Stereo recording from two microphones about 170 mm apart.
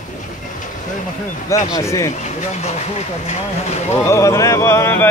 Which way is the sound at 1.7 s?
20° left (ahead or behind).